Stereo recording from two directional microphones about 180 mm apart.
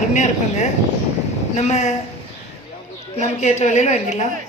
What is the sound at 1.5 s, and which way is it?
Speech, 40° left (ahead or behind).